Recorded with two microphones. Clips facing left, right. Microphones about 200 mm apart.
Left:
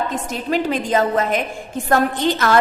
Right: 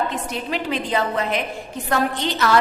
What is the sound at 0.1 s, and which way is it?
A woman's voice, 45° left (ahead or behind).